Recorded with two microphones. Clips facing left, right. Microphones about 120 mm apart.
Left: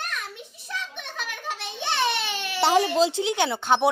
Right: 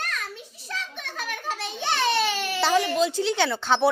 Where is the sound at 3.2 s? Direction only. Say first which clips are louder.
Even; 15° left (ahead or behind).